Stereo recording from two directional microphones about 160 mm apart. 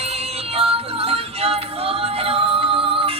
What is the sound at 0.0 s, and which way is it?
Music, 40° right (ahead or behind).